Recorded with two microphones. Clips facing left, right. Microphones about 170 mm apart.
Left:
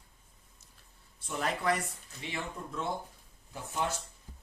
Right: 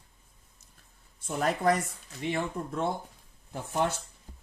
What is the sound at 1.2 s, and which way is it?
Speech, 45° right (ahead or behind).